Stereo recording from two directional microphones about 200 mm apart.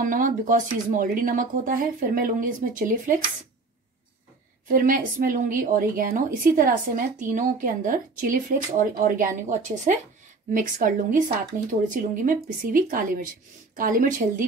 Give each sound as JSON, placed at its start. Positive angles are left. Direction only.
{"t": 0.0, "sound": "speech", "side_deg": -40}
{"t": 4.7, "sound": "a woman's voice", "side_deg": -45}